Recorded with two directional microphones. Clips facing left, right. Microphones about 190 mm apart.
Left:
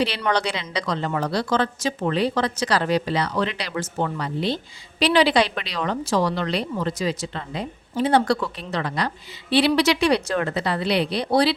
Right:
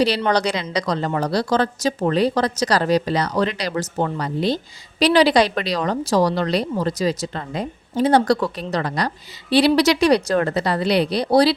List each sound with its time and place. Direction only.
0.2 s speech: 35° right (ahead or behind)